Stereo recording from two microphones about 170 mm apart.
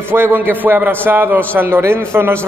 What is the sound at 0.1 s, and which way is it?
A man's voice, 10° right (ahead or behind).